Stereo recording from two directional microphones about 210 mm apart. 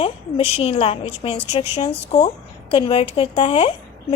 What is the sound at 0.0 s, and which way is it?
A woman's voice, 25° left (ahead or behind).